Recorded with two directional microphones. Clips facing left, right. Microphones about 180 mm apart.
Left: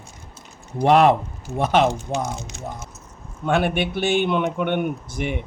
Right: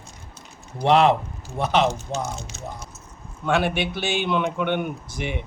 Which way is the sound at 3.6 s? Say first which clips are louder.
Left 3 dB; 50° left (ahead or behind).